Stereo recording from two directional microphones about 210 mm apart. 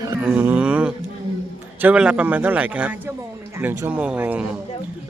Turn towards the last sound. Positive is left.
turn(degrees=-5)  # may be behind; listen again after turning